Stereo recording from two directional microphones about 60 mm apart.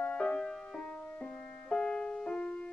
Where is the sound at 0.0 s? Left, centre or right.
Centre.